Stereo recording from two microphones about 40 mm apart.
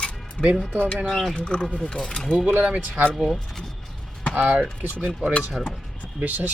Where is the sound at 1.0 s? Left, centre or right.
Centre.